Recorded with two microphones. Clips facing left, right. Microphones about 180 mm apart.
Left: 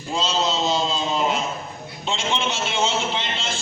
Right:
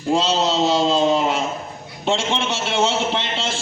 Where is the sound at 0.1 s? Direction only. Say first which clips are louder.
Right 5 dB; 75° right (ahead or behind).